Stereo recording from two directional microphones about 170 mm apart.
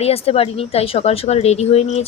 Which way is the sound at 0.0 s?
35° left (ahead or behind).